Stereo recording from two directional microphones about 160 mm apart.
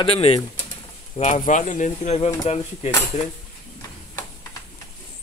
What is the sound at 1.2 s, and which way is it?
Speech, 50° left (ahead or behind).